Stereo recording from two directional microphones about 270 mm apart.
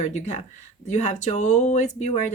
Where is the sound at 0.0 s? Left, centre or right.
Left.